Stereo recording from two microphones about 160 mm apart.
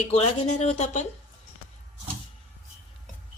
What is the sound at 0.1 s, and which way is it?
Speech, 45° left (ahead or behind).